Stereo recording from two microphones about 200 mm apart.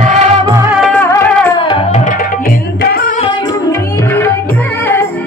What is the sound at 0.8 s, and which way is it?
Music, 5° left (ahead or behind).